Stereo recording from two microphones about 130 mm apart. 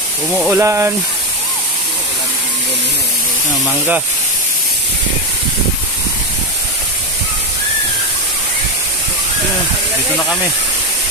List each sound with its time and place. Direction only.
0.5 s speech: 20° right (ahead or behind)